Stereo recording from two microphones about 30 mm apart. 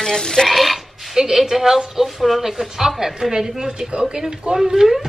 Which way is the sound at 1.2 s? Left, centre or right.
Centre.